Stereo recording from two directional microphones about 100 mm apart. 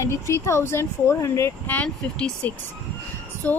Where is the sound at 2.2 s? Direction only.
15° left (ahead or behind).